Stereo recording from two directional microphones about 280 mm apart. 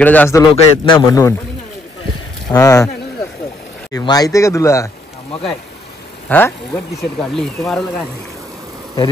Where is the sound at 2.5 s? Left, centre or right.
Centre.